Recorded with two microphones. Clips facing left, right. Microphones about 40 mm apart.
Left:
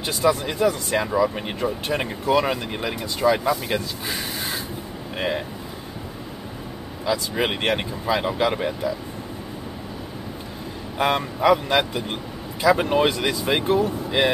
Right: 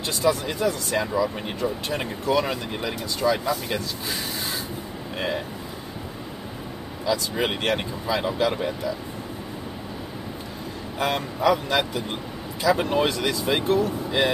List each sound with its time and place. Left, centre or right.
0.0 s speech: left
5.1 s speech: left
7.1 s speech: left
11.0 s speech: centre